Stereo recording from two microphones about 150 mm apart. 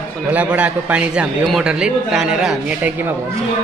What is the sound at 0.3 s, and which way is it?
A man's voice, 10° right (ahead or behind).